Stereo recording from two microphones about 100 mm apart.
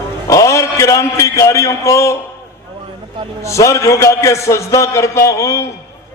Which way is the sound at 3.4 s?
30° left (ahead or behind).